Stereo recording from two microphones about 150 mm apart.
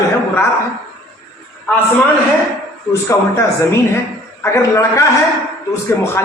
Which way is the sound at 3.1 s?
20° left (ahead or behind).